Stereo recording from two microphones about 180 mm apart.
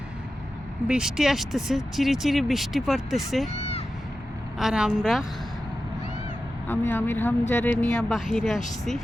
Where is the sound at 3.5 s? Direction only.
35° left (ahead or behind).